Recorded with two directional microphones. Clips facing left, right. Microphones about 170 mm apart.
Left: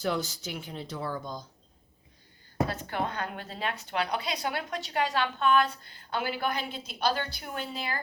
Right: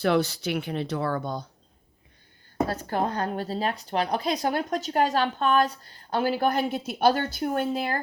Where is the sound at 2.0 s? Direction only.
60° right (ahead or behind).